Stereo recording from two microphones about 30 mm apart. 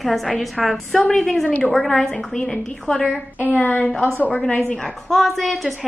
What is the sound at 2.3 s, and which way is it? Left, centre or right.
Speech, left.